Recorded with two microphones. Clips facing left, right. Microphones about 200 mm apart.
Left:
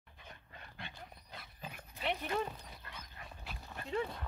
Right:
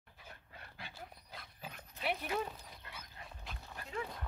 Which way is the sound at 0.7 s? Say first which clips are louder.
Even; 5° right (ahead or behind).